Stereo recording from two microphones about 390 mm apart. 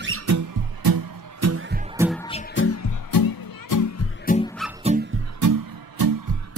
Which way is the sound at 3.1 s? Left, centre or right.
Left.